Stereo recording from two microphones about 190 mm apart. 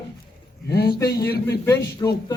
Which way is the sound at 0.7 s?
55° left (ahead or behind).